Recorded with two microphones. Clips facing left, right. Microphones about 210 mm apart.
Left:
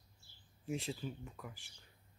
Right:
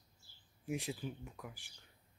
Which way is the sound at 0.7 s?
15° right (ahead or behind).